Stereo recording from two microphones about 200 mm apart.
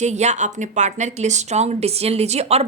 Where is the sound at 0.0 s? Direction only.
35° right (ahead or behind).